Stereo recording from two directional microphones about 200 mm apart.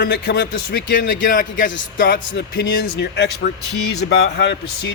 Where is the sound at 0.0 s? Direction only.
50° left (ahead or behind).